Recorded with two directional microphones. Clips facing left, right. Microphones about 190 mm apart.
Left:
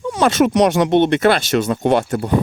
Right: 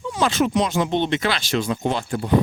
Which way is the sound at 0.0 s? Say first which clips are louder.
Left 6 dB; 65° left (ahead or behind).